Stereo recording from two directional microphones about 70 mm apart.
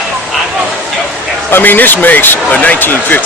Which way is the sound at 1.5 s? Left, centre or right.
Left.